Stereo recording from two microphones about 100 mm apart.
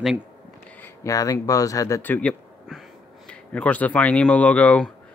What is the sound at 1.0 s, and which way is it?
Speech, 35° left (ahead or behind).